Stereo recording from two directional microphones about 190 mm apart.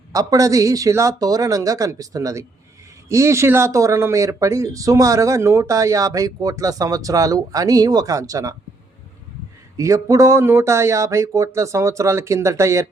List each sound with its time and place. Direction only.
0.1 s speech: 20° right (ahead or behind)
9.7 s speech: 15° right (ahead or behind)